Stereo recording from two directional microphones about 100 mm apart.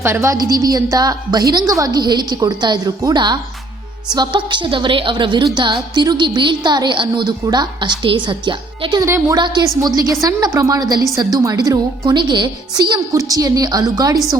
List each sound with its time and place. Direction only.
0.0 s a woman's voice: 25° right (ahead or behind)
0.3 s a woman's voice: 40° right (ahead or behind); by 9.0 s 55° right (ahead or behind)
9.0 s a woman's voice: 25° right (ahead or behind)
9.6 s a woman's voice: 40° right (ahead or behind)